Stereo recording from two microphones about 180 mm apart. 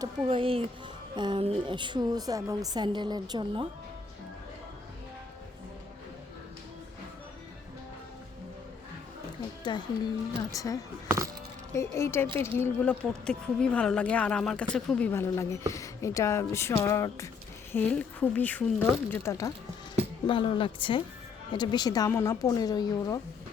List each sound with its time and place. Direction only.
0.3 s a woman's voice: 30° right (ahead or behind)
9.7 s a woman's voice: 25° left (ahead or behind)
20.2 s a woman's voice: 30° left (ahead or behind)